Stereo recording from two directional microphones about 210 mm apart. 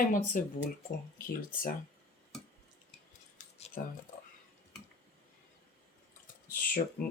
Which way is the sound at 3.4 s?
30° left (ahead or behind).